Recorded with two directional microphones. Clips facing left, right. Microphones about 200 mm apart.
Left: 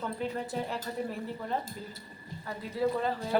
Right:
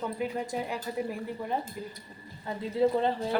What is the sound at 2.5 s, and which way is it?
Speech, 25° right (ahead or behind).